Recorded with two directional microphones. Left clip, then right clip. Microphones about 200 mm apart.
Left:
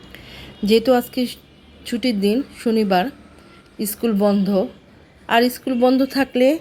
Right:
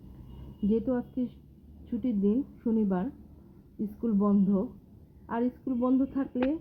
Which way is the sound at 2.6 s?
50° left (ahead or behind).